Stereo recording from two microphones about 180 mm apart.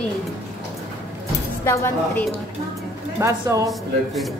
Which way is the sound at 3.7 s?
Centre (ahead or behind).